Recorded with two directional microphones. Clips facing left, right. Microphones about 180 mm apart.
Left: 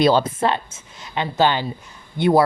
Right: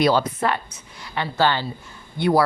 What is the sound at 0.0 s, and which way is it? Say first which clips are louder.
Speech: left 2 dB; 25° left (ahead or behind).